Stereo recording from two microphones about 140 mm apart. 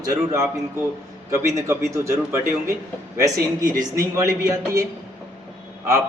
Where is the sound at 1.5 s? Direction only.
20° right (ahead or behind).